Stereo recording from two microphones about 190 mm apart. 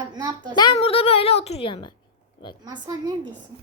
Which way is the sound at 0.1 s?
20° right (ahead or behind).